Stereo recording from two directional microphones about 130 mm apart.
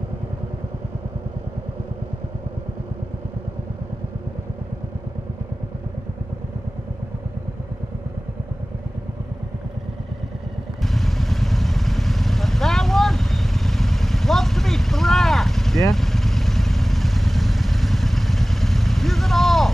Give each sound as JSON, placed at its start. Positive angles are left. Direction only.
{"t": 10.8, "sound": "vehicle", "side_deg": 0}